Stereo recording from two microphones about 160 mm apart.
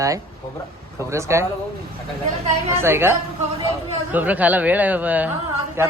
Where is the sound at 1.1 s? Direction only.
15° right (ahead or behind).